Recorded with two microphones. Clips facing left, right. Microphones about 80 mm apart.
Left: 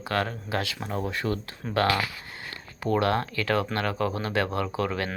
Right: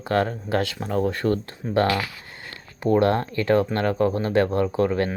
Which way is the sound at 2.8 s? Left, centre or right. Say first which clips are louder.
Right 5 dB; right.